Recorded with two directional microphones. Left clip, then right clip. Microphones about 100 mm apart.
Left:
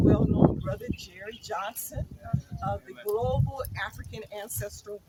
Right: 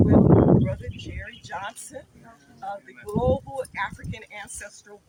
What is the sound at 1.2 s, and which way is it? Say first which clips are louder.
Speech: left 1 dB; 30° left (ahead or behind).